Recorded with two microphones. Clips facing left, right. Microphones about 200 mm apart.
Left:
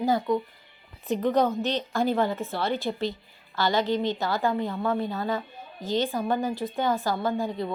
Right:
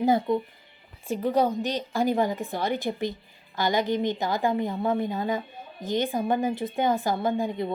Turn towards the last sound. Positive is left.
turn(degrees=-20)  # may be behind; listen again after turning